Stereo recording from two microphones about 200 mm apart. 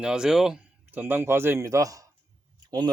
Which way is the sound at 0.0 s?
5° right (ahead or behind).